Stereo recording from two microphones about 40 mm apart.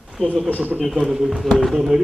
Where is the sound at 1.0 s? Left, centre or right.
Centre.